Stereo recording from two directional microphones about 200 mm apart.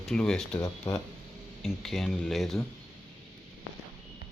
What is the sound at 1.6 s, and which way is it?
Speech, centre (ahead or behind).